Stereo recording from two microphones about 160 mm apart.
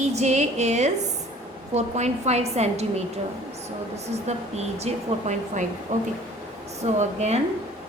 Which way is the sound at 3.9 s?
40° right (ahead or behind).